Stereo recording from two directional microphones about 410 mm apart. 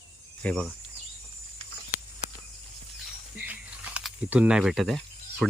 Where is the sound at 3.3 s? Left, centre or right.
Centre.